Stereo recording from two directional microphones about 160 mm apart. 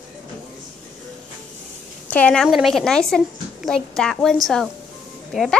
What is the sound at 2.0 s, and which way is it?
Speech, 10° left (ahead or behind).